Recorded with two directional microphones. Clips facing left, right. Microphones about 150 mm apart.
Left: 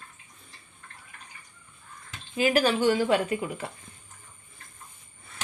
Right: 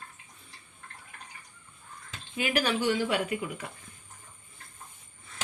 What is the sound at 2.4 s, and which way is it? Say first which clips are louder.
Speech: left 5 dB; 35° left (ahead or behind).